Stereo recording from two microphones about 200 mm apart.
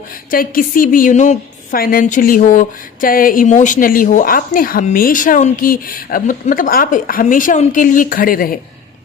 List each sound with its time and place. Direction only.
0.3 s a woman's voice: 45° left (ahead or behind)